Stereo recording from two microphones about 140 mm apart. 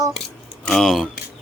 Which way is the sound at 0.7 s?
Centre (ahead or behind).